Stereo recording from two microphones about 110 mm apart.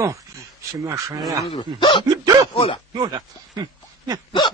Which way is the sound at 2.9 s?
40° right (ahead or behind).